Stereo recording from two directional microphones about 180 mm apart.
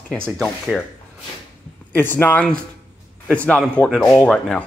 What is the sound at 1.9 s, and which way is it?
Speech, 10° left (ahead or behind).